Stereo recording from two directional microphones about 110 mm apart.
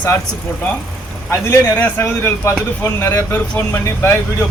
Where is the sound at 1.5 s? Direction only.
20° left (ahead or behind).